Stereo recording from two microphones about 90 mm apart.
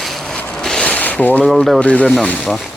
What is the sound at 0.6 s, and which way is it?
Zipper, 5° left (ahead or behind).